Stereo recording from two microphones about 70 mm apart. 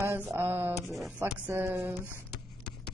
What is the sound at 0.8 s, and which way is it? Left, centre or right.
Speech, centre.